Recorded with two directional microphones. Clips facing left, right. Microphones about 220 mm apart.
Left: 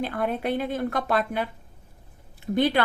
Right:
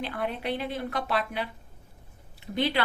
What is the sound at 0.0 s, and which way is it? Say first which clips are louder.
Speech: left 5 dB; 50° left (ahead or behind).